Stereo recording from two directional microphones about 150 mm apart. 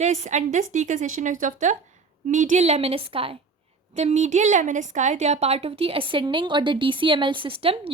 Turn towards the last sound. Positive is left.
turn(degrees=-40)  # may be behind; listen again after turning